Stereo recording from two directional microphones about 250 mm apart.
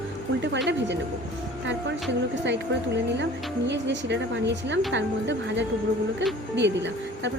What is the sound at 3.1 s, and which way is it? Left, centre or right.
Speech, right.